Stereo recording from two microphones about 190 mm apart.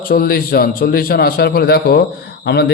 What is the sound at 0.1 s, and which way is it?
A man's voice, 50° left (ahead or behind).